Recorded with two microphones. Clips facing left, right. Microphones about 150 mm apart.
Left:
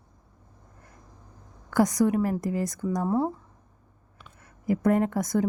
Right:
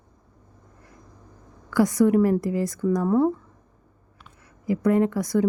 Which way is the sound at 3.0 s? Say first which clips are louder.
Right 5 dB; 30° left (ahead or behind).